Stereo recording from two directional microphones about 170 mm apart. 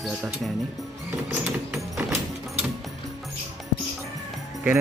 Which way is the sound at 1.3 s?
5° right (ahead or behind).